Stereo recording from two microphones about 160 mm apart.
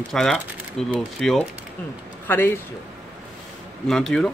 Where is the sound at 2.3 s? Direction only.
10° left (ahead or behind).